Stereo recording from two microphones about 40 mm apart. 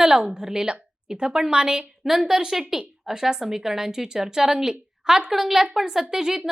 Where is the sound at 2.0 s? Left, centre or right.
Centre.